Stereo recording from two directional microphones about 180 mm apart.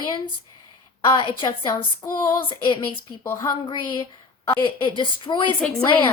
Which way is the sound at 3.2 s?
15° left (ahead or behind).